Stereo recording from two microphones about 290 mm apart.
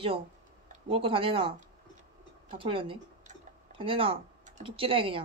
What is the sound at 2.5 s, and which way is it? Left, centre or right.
Tick-tock, centre.